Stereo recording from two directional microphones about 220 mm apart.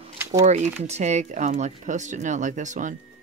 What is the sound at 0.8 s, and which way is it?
Speech, 30° right (ahead or behind).